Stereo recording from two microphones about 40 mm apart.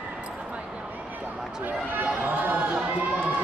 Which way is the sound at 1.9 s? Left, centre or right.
Right.